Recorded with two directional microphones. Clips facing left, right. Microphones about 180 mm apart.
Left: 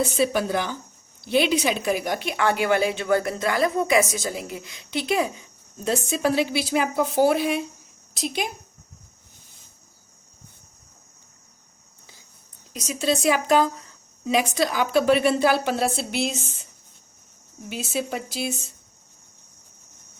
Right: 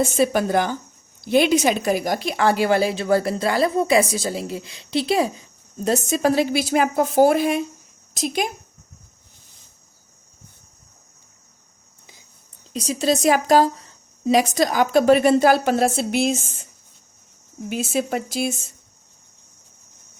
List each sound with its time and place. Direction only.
0.0 s a woman's voice: 45° right (ahead or behind)
12.7 s a woman's voice: 35° right (ahead or behind); by 16.5 s 50° right (ahead or behind)
17.7 s a woman's voice: 50° right (ahead or behind)